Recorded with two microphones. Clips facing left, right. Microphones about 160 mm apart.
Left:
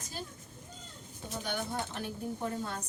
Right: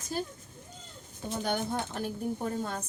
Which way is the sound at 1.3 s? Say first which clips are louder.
Right 5 dB; 45° right (ahead or behind).